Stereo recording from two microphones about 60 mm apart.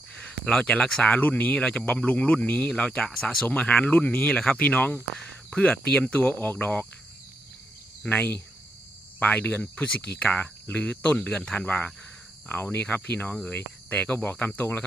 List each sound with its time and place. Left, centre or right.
0.2 s speech: centre
1.1 s speech: left; by 3.4 s centre
3.4 s speech: left
8.1 s speech: left
11.3 s speech: centre
13.5 s cricket: left